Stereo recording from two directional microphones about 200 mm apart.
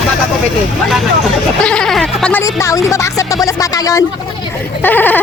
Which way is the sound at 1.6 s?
5° left (ahead or behind).